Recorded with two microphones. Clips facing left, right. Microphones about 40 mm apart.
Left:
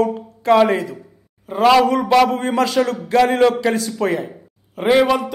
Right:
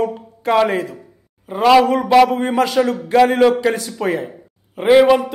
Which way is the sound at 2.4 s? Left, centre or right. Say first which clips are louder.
Right 1 dB; centre.